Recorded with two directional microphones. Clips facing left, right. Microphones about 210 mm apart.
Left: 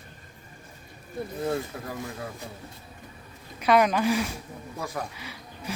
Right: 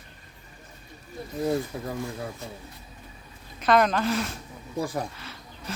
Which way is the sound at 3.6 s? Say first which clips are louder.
Even; 10° left (ahead or behind).